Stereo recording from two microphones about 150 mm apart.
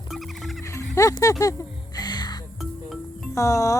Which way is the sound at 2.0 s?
25° left (ahead or behind).